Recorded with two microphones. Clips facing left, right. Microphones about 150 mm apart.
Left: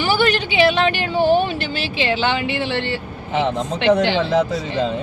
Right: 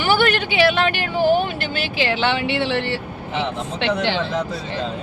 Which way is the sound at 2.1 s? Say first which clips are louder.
Right 2 dB; 70° right (ahead or behind).